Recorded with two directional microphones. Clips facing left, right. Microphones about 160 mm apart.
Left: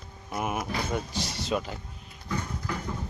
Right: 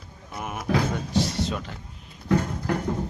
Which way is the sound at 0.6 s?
90° right.